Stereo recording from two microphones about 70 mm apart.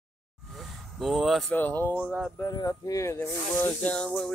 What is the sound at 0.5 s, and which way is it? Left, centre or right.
Vehicle, centre.